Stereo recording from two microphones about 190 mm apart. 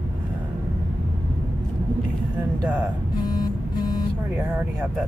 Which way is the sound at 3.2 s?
20° left (ahead or behind).